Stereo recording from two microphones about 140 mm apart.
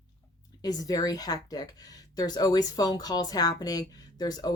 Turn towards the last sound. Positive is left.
turn(degrees=30)  # may be behind; listen again after turning